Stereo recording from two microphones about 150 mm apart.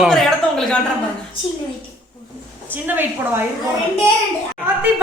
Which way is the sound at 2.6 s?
15° right (ahead or behind).